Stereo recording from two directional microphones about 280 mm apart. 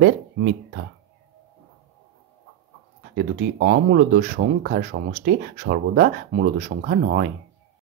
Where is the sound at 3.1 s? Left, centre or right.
Right.